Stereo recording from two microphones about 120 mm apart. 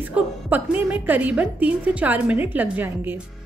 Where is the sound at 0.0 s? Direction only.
15° right (ahead or behind).